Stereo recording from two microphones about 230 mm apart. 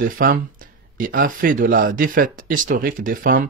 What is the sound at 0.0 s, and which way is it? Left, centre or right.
Speech, right.